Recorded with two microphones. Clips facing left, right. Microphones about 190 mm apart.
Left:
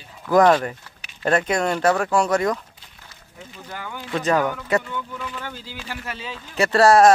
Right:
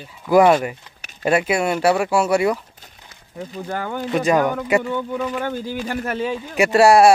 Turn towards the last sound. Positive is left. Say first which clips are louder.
# right 2 dB
turn(degrees=-15)  # may be behind; listen again after turning